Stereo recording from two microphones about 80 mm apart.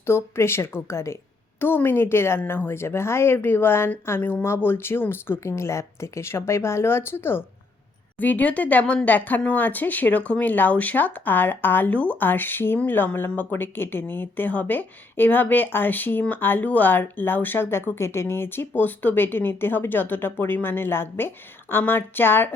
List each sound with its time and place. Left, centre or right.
0.0 s a woman's voice: left